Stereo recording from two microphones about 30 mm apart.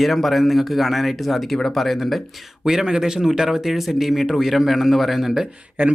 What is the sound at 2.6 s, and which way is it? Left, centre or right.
A man's voice, centre.